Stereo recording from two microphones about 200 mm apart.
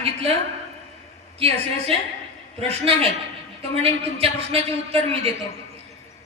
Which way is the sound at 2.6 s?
30° right (ahead or behind).